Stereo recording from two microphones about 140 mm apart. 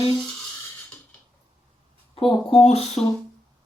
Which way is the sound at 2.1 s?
40° left (ahead or behind).